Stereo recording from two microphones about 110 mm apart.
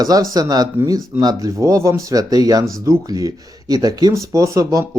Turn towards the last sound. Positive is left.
turn(degrees=-30)  # may be behind; listen again after turning